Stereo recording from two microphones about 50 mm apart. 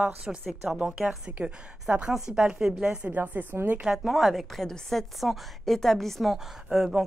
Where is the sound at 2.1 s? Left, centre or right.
Centre.